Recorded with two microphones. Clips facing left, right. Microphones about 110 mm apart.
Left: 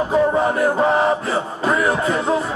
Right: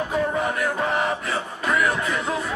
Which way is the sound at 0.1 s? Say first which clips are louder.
Left 8 dB; 30° left (ahead or behind).